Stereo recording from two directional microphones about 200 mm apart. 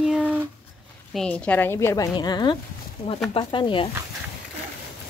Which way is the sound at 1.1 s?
5° left (ahead or behind).